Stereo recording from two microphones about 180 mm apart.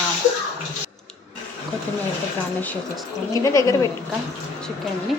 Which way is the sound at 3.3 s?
20° left (ahead or behind).